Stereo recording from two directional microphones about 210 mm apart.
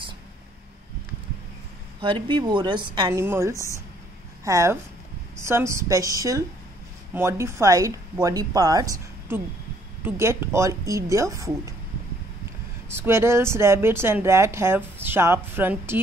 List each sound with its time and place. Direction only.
2.0 s a woman's voice: 25° right (ahead or behind)
12.9 s speech: 10° right (ahead or behind)